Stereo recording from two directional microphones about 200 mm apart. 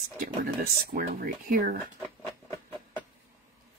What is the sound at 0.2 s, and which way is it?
Speech, 45° right (ahead or behind).